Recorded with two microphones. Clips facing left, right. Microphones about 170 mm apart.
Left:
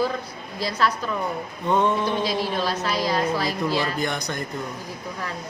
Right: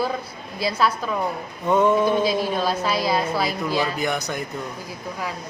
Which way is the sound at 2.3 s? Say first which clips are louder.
Right 2 dB; 45° right (ahead or behind).